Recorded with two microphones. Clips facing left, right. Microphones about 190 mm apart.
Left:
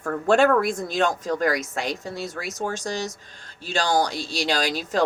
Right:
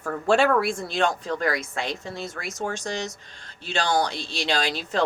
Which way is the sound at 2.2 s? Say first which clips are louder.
Left 2 dB; centre (ahead or behind).